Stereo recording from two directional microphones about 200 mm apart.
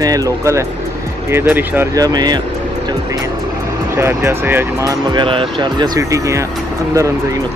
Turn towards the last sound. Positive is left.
turn(degrees=-15)  # may be behind; listen again after turning